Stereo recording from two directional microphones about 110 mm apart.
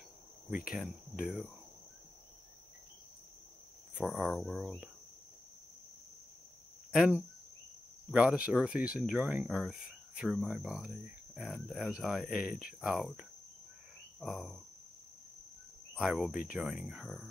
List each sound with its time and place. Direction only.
0.5 s speech: 5° right (ahead or behind)
4.0 s speech: centre (ahead or behind)
6.9 s cricket: 10° right (ahead or behind)
8.1 s speech: 10° right (ahead or behind)
14.2 s speech: centre (ahead or behind)
15.9 s speech: 5° right (ahead or behind)